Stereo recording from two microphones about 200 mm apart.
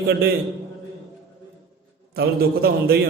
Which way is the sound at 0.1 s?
50° right (ahead or behind).